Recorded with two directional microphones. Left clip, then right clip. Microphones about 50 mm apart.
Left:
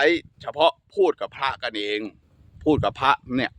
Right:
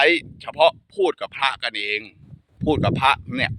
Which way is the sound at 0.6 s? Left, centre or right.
Left.